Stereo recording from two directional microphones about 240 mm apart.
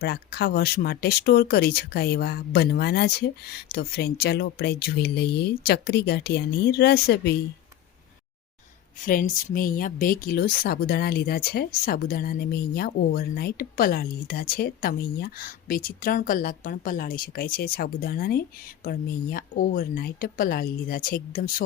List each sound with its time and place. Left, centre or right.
0.0 s speech: left
9.0 s speech: left